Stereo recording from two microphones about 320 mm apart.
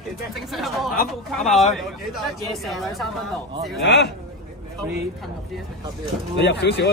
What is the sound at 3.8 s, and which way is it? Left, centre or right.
Speech, left.